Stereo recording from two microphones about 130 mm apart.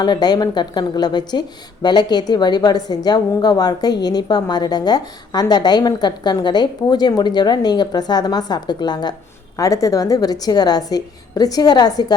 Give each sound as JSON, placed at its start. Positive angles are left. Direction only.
{"t": 0.0, "sound": "a woman's voice", "side_deg": 30}